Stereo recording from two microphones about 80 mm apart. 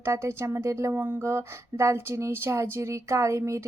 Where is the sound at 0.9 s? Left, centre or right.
Right.